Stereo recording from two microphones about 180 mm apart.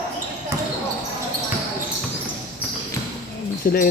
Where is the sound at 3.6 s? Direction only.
55° left (ahead or behind).